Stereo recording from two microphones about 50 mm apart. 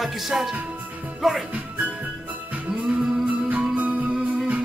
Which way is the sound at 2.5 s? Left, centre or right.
Right.